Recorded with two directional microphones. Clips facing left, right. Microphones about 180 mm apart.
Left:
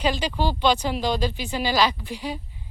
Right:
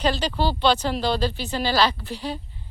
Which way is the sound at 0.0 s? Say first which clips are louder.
Right 1 dB; 10° left (ahead or behind).